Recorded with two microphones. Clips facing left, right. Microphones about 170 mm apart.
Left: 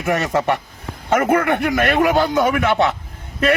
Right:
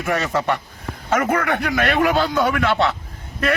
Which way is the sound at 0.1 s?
20° left (ahead or behind).